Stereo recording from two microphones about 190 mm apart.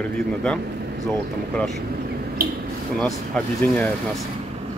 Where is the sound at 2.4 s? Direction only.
50° right (ahead or behind).